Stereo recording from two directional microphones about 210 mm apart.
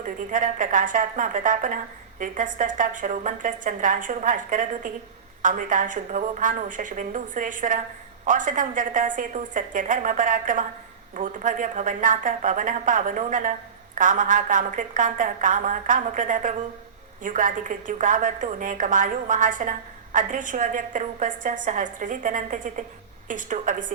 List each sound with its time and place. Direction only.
0.3 s a woman's voice: 40° right (ahead or behind)